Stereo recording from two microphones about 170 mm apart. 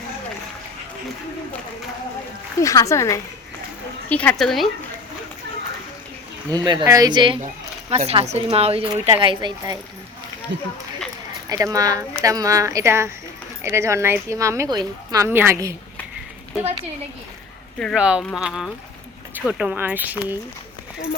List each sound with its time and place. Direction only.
2.6 s a woman's voice: 20° left (ahead or behind); by 4.7 s centre (ahead or behind)
6.5 s a woman's voice: 25° right (ahead or behind)
10.5 s speech: 90° right
11.4 s a woman's voice: 20° right (ahead or behind)
17.7 s a woman's voice: centre (ahead or behind)